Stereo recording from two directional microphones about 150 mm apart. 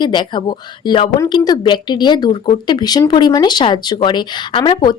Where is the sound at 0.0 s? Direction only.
30° left (ahead or behind).